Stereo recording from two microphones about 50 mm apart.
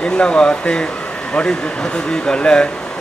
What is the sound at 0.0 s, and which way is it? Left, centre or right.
Speech, centre.